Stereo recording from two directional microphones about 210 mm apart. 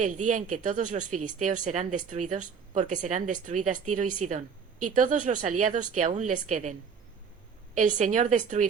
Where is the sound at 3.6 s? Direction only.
90° right.